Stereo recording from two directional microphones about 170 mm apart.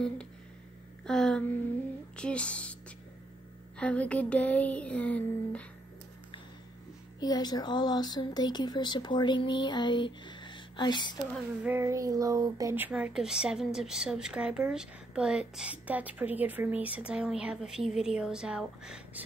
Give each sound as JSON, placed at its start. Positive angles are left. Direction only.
{"t": 1.0, "sound": "a sound", "side_deg": 5}
{"t": 7.2, "sound": "speech", "side_deg": 25}
{"t": 11.6, "sound": "speech", "side_deg": -15}